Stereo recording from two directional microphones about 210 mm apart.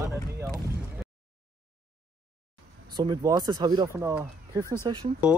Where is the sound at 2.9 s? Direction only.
20° right (ahead or behind).